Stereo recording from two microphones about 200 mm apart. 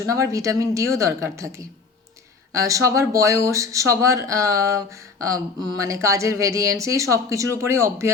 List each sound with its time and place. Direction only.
0.0 s speech: 15° right (ahead or behind)